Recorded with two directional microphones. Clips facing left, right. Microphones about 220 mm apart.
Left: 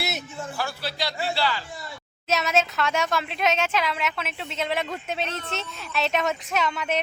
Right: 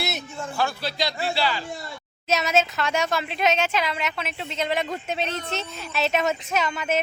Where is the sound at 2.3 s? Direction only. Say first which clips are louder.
Right 1 dB; centre (ahead or behind).